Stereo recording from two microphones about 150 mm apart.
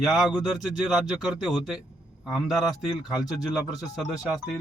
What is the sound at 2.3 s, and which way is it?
Speech, centre (ahead or behind).